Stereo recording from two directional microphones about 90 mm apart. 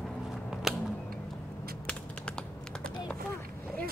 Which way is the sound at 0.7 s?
5° right (ahead or behind).